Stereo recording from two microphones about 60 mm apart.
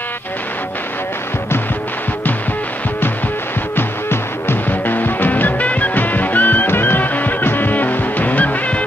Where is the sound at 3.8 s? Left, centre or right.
Left.